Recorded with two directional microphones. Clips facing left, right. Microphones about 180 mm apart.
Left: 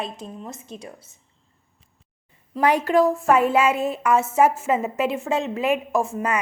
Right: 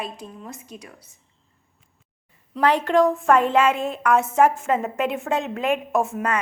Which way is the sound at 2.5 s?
10° left (ahead or behind).